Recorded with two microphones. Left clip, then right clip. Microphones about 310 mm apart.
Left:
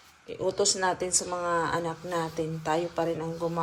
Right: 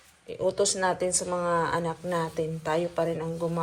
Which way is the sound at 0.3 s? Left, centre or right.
Centre.